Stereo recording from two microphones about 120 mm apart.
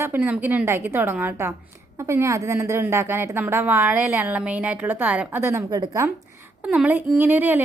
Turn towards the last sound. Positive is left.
turn(degrees=-15)  # may be behind; listen again after turning